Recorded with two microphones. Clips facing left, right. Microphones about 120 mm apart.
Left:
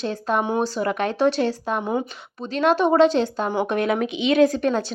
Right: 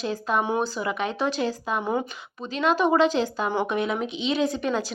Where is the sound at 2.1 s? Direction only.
30° left (ahead or behind).